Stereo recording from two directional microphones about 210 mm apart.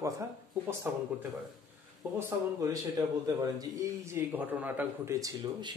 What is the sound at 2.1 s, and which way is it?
A man's voice, 15° right (ahead or behind).